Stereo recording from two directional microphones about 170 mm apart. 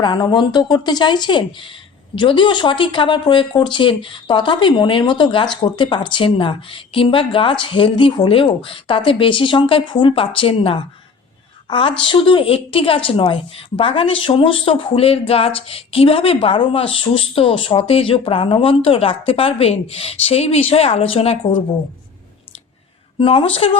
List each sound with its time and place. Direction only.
0.0 s a woman's voice: 25° left (ahead or behind)
23.2 s a woman's voice: 30° left (ahead or behind)